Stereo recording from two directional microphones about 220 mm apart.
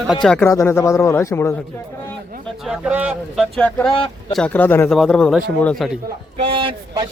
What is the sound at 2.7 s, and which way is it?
A man's voice, 5° right (ahead or behind).